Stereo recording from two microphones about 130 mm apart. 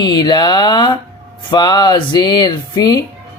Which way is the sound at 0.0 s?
35° left (ahead or behind).